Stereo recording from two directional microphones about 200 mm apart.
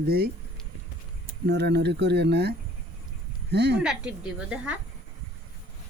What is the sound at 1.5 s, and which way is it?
Speech, 60° right (ahead or behind).